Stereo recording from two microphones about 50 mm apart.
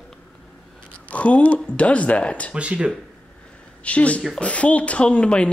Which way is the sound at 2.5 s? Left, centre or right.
Right.